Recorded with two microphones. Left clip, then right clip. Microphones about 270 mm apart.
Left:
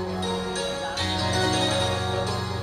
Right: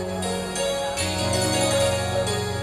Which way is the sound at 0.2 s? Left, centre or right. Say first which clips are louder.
Right 2 dB; centre.